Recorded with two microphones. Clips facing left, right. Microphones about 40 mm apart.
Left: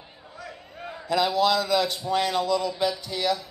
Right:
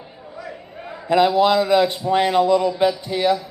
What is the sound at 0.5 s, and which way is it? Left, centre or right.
A man's voice, right.